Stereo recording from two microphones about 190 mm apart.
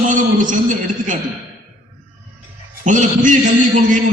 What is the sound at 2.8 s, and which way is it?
Speech, 40° right (ahead or behind).